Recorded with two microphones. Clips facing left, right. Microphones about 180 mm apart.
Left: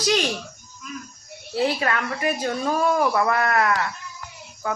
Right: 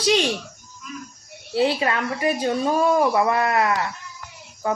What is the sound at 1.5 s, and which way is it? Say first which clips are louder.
A woman's voice: right 2 dB; 25° right (ahead or behind).